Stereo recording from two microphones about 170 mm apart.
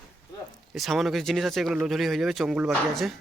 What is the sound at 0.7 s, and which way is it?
Speech, centre (ahead or behind).